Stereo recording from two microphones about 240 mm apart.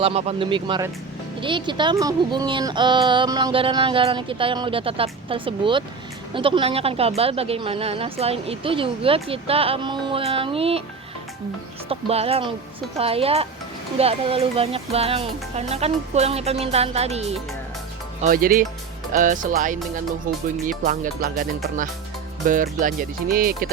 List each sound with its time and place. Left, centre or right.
0.0 s speech: right
11.9 s speech: right
22.4 s speech: right